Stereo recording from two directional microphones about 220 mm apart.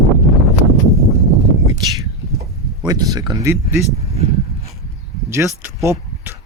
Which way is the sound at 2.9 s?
15° right (ahead or behind).